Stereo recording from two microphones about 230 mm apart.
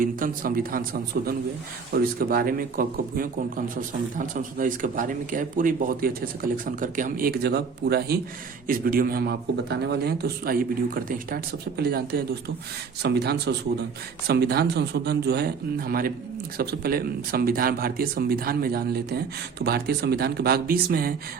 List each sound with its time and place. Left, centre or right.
0.0 s a man's voice: right